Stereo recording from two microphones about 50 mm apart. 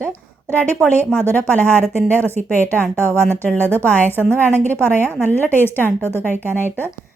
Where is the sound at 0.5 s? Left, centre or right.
Left.